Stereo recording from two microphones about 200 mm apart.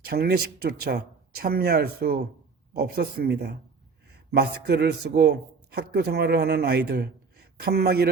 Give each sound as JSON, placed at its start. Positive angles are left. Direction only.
{"t": 0.0, "sound": "speech", "side_deg": -50}